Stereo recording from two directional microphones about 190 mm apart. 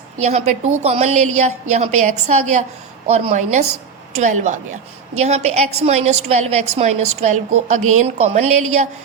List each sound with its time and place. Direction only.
0.2 s a woman's voice: 35° right (ahead or behind)